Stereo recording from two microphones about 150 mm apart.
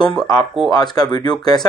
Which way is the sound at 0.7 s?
25° left (ahead or behind).